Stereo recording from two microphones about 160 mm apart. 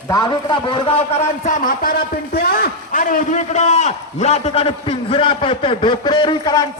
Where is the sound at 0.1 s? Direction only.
25° left (ahead or behind).